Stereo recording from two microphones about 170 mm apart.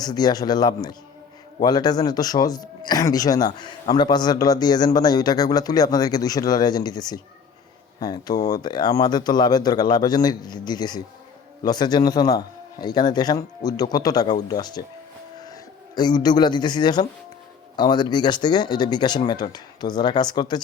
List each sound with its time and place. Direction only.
0.0 s speech: 25° left (ahead or behind)
16.0 s speech: 25° left (ahead or behind)